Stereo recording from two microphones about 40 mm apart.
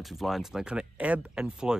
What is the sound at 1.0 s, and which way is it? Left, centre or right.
Speech, right.